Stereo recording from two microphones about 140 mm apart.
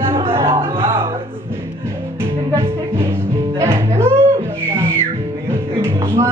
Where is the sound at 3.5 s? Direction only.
20° right (ahead or behind).